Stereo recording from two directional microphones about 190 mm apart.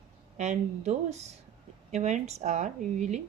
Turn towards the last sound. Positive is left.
turn(degrees=-40)  # may be behind; listen again after turning